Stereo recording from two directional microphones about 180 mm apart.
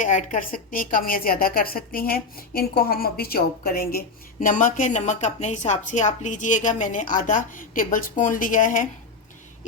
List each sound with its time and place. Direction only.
0.0 s a woman's voice: 45° left (ahead or behind)